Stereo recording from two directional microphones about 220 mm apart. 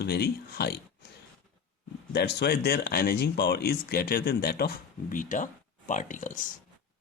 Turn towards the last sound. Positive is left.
turn(degrees=35)  # may be behind; listen again after turning